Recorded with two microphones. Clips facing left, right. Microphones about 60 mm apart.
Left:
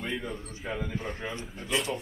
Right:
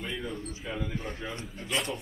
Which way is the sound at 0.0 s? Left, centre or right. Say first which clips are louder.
Left 1 dB; left.